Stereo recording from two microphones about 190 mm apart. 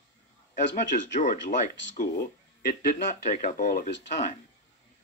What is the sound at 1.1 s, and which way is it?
Speech, 40° left (ahead or behind).